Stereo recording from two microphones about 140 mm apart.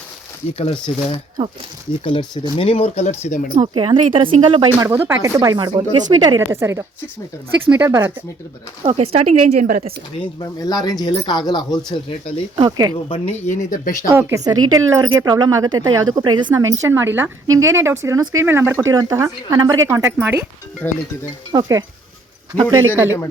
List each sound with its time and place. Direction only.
0.5 s speech: 45° left (ahead or behind)
3.2 s speech: 65° left (ahead or behind)
3.6 s speech: 40° right (ahead or behind)
4.8 s a woman's voice: 15° right (ahead or behind)
6.4 s a woman's voice: 20° right (ahead or behind)
8.8 s speech: 45° right (ahead or behind); by 9.8 s 65° right (ahead or behind)
10.6 s speech: 25° left (ahead or behind)
12.5 s a woman's voice: 30° right (ahead or behind)
13.1 s speech: 45° left (ahead or behind); by 13.9 s 70° left (ahead or behind)
14.1 s a woman's voice: 20° right (ahead or behind)
20.8 s speech: 15° left (ahead or behind)
21.5 s a woman's voice: 30° right (ahead or behind)